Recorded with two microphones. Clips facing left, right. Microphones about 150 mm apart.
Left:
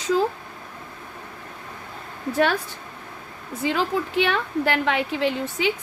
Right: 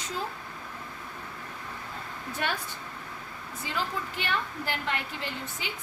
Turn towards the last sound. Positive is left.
turn(degrees=90)